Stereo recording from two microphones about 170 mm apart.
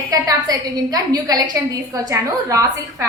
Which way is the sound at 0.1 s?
20° right (ahead or behind).